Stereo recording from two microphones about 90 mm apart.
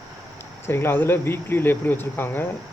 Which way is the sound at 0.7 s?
25° left (ahead or behind).